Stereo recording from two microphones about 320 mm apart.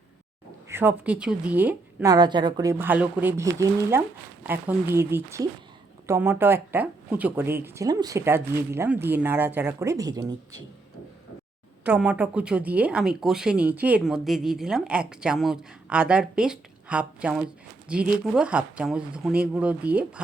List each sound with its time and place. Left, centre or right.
0.7 s speech: centre
11.9 s speech: centre